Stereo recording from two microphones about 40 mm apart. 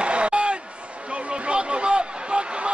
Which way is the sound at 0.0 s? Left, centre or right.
Right.